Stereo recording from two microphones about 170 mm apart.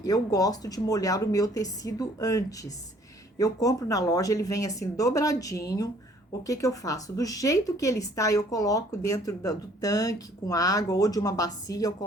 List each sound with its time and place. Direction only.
0.0 s speech: 20° left (ahead or behind)